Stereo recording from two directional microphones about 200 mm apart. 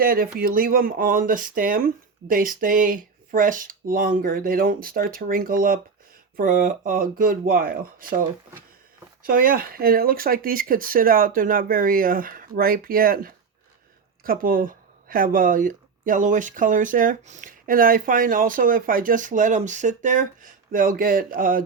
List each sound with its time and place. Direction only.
0.0 s speech: 50° right (ahead or behind)
9.2 s speech: 45° right (ahead or behind)